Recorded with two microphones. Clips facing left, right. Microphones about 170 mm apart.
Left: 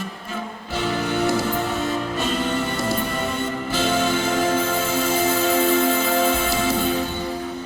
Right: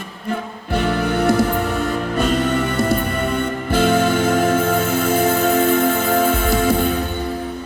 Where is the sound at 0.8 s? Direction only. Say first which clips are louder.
Right 3 dB; 55° right (ahead or behind).